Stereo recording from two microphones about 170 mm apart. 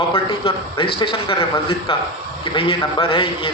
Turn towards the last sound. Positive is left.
turn(degrees=30)  # may be behind; listen again after turning